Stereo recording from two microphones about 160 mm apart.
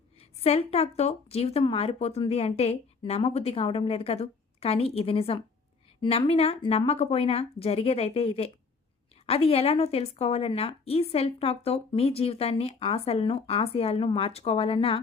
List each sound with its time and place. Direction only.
0.2 s a woman's voice: 40° left (ahead or behind)